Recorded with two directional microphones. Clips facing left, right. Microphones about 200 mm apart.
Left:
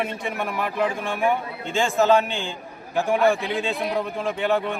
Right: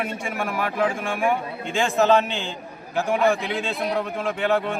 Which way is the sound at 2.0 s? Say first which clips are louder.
Even; 15° left (ahead or behind).